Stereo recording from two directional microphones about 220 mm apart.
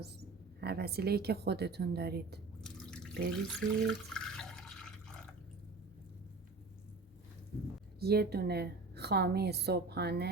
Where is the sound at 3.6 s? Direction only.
50° right (ahead or behind).